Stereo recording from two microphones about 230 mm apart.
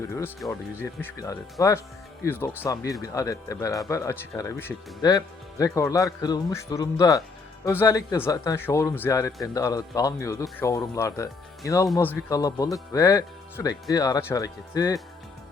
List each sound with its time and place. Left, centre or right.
0.3 s speech: centre
1.1 s speech: centre